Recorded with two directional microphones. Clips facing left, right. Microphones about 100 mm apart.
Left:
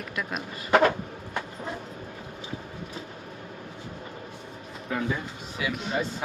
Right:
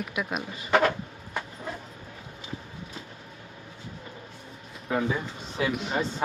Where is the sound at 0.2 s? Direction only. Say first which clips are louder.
Even; 5° right (ahead or behind).